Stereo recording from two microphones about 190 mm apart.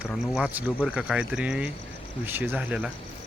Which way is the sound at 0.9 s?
5° right (ahead or behind).